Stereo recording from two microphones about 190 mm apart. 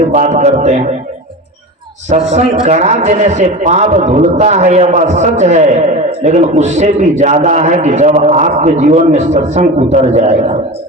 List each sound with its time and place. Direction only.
0.1 s a man's voice: 40° right (ahead or behind)
2.0 s a man's voice: 35° right (ahead or behind)